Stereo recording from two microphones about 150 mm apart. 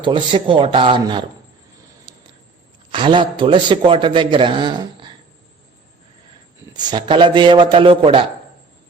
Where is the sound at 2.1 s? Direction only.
30° right (ahead or behind).